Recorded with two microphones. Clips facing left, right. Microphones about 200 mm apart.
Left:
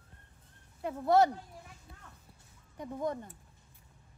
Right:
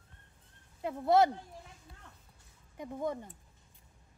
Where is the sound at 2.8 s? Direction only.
20° right (ahead or behind).